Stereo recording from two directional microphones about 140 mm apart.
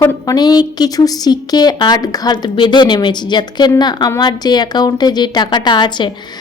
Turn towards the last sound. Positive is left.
turn(degrees=30)  # may be behind; listen again after turning